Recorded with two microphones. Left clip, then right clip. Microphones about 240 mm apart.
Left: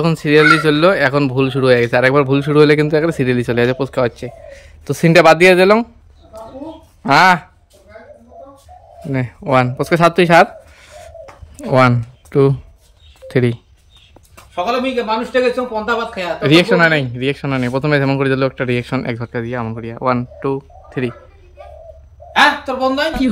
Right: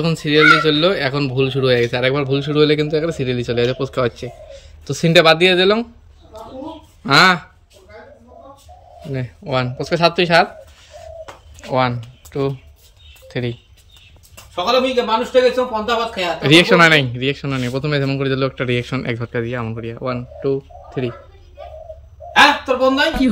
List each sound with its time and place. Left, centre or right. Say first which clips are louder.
0.0 s speech: left 2 dB; centre
7.0 s speech: left 2 dB; centre
9.1 s speech: left 7 dB; centre
11.5 s speech: left 6 dB; left
14.5 s a man's voice: right 1 dB; centre
22.3 s speech: right 1 dB; centre